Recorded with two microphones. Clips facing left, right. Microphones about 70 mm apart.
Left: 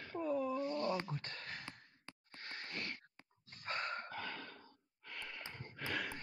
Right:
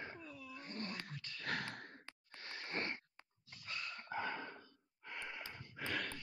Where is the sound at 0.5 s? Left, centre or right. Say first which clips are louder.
Left 10 dB; right.